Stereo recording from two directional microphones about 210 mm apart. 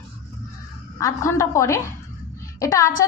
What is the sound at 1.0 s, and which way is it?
A woman's voice, 15° left (ahead or behind).